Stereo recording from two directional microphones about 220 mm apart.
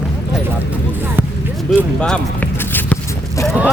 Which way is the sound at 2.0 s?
5° left (ahead or behind).